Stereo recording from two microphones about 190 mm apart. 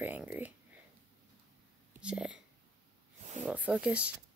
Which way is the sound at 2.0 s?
5° right (ahead or behind).